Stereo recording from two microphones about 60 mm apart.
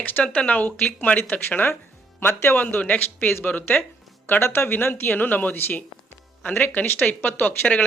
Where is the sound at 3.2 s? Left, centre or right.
Left.